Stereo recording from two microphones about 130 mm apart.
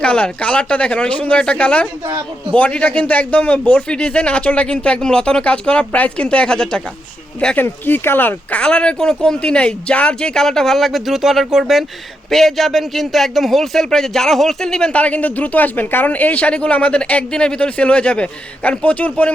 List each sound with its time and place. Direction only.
0.0 s a man's voice: 10° left (ahead or behind)